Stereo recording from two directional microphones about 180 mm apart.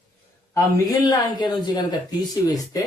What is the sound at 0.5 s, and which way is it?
Speech, 20° left (ahead or behind).